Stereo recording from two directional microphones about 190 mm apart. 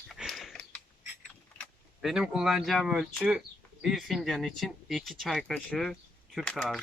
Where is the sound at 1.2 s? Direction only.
Centre (ahead or behind).